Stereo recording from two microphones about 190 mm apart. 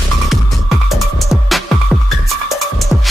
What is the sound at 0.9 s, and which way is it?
Music, centre (ahead or behind).